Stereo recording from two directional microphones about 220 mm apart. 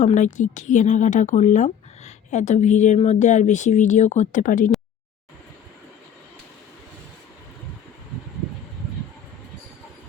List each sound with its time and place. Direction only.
0.0 s speech: 35° left (ahead or behind)